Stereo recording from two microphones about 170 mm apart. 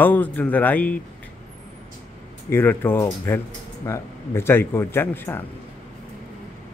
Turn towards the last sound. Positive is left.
turn(degrees=15)  # may be behind; listen again after turning